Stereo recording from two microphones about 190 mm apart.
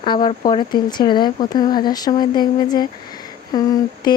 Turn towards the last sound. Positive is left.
turn(degrees=20)  # may be behind; listen again after turning